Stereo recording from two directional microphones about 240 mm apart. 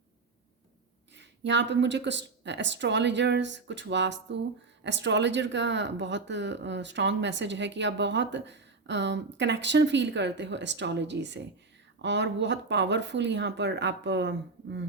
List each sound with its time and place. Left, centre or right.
1.1 s speech: right